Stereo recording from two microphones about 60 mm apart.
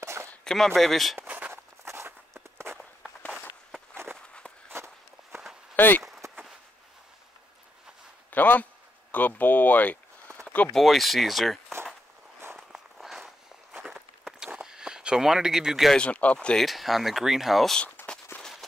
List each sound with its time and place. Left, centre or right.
0.0 s a sound: right
0.4 s speech: centre
1.2 s walk: right
1.5 s walk: right
3.9 s walk: right
5.8 s a sound: left
8.3 s a sound: left
9.1 s speech: left
10.7 s speech: centre
12.5 s walk: centre
14.5 s a sound: centre
16.0 s speech: left
16.6 s speech: centre
18.0 s walk: centre